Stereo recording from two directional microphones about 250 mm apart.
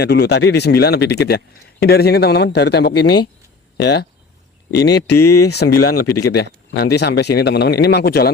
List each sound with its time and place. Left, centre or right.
0.0 s speech: left
5.1 s speech: left
6.3 s speech: left